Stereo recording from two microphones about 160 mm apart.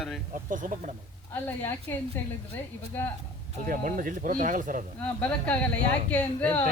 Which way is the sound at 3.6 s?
55° right (ahead or behind).